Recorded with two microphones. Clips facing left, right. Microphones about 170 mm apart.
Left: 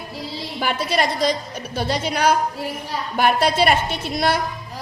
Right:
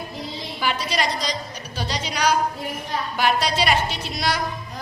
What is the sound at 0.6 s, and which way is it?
A woman's voice, 50° left (ahead or behind).